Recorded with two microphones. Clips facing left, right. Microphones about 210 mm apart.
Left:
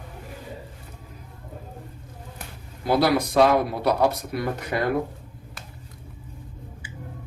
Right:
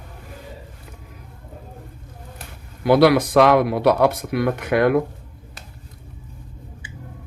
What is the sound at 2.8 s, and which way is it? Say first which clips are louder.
Speech: right 7 dB; 70° right (ahead or behind).